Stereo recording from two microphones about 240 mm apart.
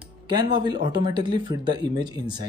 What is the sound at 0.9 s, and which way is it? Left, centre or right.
Speech, centre.